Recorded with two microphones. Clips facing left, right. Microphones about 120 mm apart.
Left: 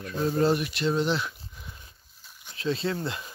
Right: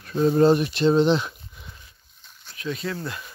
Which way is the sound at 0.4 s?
30° right (ahead or behind).